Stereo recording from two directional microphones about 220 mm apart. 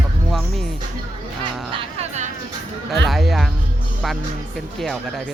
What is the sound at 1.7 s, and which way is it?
Dog, 30° right (ahead or behind).